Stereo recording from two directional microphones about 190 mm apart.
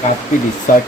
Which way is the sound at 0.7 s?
45° left (ahead or behind).